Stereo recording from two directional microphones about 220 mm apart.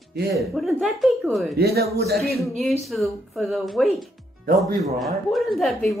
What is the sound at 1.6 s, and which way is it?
Speech, 45° right (ahead or behind).